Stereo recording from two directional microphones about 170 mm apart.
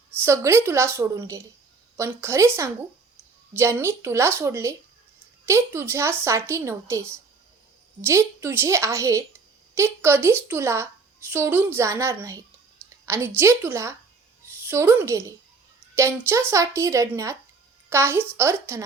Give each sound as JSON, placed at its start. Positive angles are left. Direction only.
{"t": 0.2, "sound": "a woman's voice", "side_deg": -15}